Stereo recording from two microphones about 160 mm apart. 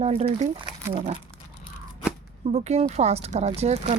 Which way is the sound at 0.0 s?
40° right (ahead or behind).